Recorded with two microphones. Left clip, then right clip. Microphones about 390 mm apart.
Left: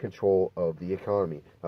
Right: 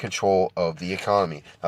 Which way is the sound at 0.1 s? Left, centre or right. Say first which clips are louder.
Right 4 dB; right.